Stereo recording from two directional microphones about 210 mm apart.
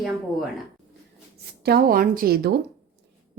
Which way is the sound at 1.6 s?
45° right (ahead or behind).